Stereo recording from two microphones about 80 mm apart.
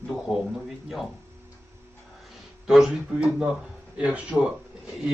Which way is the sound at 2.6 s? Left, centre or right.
Centre.